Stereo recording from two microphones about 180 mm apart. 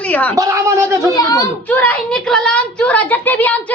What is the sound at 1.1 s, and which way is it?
A woman's voice, 15° left (ahead or behind).